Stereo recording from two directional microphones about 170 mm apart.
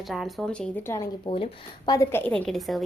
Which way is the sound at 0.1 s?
Centre (ahead or behind).